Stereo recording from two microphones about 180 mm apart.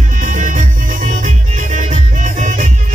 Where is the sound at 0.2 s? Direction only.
45° right (ahead or behind).